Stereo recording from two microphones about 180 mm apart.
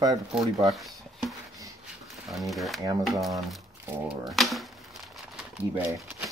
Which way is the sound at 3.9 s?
5° right (ahead or behind).